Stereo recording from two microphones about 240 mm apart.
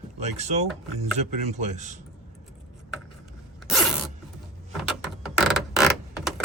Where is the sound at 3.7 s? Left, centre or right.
Centre.